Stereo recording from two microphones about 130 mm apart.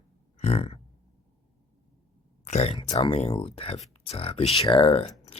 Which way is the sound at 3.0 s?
50° left (ahead or behind).